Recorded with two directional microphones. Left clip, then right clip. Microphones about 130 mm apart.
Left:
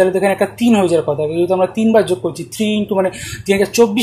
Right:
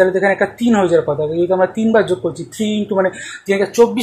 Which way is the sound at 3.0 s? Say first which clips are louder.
Even; 35° left (ahead or behind).